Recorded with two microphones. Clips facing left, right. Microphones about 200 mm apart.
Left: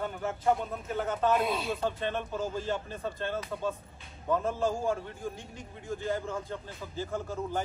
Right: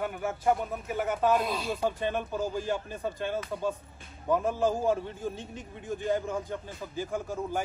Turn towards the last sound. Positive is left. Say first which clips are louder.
# right 1 dB
turn(degrees=-15)  # may be behind; listen again after turning